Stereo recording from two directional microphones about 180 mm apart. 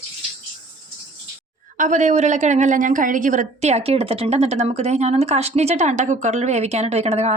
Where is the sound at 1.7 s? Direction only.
45° right (ahead or behind).